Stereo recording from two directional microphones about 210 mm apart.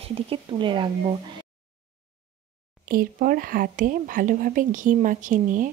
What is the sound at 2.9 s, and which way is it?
A woman's voice, 40° right (ahead or behind).